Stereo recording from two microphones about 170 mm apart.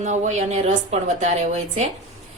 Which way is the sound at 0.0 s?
45° right (ahead or behind).